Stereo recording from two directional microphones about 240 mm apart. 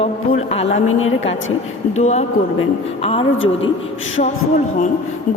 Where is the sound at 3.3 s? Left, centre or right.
Left.